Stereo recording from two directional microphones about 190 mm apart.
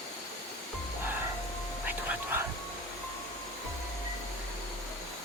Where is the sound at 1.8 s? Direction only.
10° right (ahead or behind).